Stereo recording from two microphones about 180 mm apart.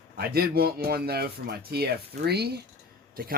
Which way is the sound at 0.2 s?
60° right (ahead or behind).